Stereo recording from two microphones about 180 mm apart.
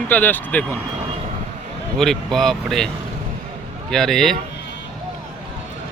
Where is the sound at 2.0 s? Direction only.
Centre (ahead or behind).